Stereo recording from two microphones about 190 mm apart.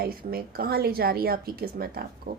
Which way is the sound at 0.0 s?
50° right (ahead or behind).